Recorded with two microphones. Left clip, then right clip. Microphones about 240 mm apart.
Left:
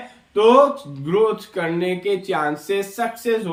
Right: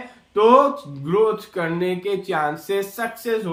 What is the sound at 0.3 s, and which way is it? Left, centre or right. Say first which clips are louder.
Speech: left 1 dB; centre.